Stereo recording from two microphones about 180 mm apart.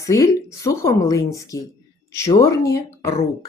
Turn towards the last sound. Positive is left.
turn(degrees=15)  # may be behind; listen again after turning